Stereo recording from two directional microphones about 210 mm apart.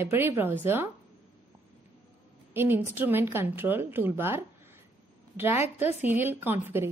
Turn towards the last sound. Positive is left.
turn(degrees=-10)  # may be behind; listen again after turning